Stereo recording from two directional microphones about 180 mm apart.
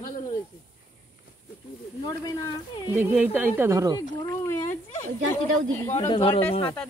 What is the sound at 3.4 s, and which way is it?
Speech, 15° right (ahead or behind).